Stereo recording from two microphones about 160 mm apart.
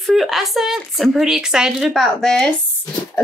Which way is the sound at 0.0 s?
Centre (ahead or behind).